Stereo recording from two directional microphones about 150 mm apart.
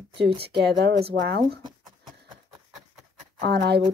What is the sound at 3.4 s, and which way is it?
Speech, 90° right.